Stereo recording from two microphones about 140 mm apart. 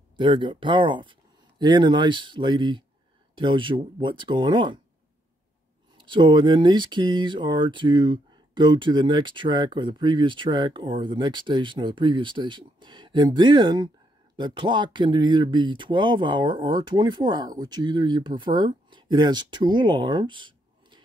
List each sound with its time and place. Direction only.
0.2 s speech: 35° right (ahead or behind)
5.9 s speech: 35° right (ahead or behind)